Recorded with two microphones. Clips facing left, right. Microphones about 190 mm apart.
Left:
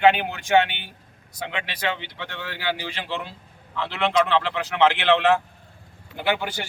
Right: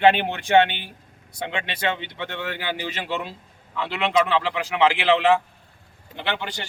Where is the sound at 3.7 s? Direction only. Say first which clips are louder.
Even; 5° right (ahead or behind); by 6.6 s 10° left (ahead or behind).